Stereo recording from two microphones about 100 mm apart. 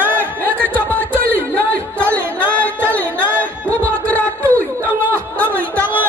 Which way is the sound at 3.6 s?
15° left (ahead or behind).